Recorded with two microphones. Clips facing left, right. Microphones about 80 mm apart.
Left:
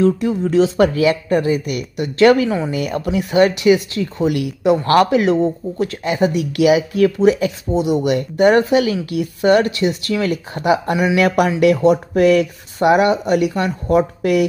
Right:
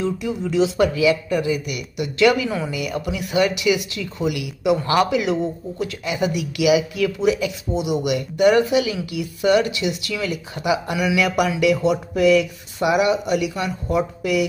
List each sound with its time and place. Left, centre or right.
0.0 s speech: left